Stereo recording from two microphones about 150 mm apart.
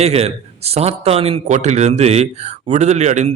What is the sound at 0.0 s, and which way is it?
Speech, 45° right (ahead or behind).